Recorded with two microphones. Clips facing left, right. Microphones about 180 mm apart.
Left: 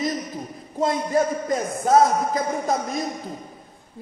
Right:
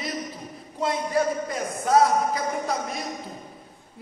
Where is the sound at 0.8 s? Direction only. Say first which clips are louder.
Left 3 dB; 40° left (ahead or behind).